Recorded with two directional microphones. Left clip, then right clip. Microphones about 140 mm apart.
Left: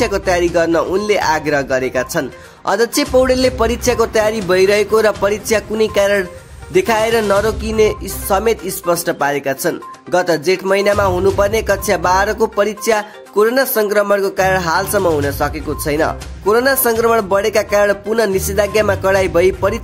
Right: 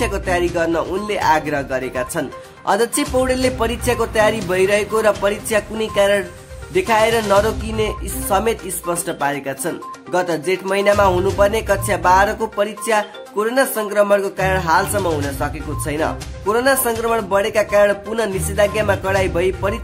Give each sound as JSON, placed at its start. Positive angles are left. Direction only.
{"t": 0.0, "sound": "speech", "side_deg": 30}